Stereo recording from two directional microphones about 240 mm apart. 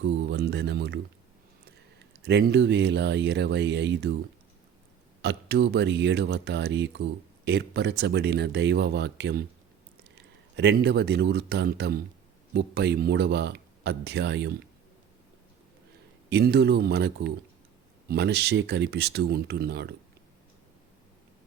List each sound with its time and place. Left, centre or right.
0.0 s speech: right
2.2 s speech: right
5.2 s speech: right
10.6 s speech: right
16.3 s speech: right